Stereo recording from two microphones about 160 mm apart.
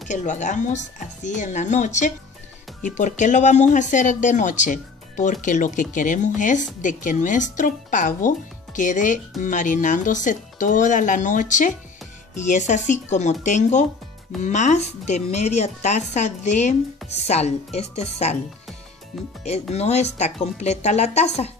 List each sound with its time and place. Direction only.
0.1 s speech: 50° left (ahead or behind)
19.4 s speech: 40° left (ahead or behind)